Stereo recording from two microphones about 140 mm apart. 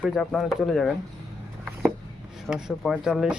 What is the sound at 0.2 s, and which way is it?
Speech, 5° left (ahead or behind).